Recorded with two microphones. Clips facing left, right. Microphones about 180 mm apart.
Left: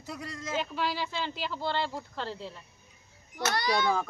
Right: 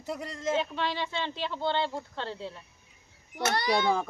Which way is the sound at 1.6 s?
25° right (ahead or behind).